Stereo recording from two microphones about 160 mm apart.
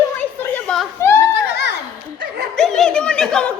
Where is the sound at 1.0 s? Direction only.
15° left (ahead or behind).